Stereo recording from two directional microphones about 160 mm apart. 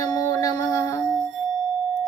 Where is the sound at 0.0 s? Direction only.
20° left (ahead or behind).